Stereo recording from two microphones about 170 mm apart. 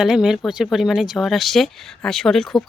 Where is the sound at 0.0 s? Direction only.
5° right (ahead or behind).